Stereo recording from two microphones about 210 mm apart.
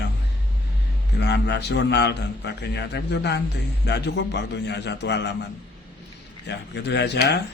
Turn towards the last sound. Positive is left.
turn(degrees=55)  # may be behind; listen again after turning